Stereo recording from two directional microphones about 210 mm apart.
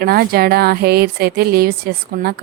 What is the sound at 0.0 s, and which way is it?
Speech, 45° right (ahead or behind).